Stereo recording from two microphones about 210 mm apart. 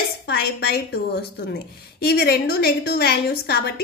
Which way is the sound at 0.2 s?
50° left (ahead or behind).